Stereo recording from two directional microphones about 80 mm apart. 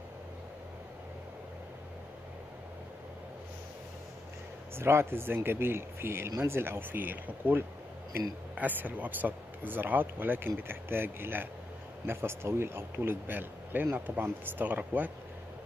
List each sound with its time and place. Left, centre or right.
4.7 s speech: right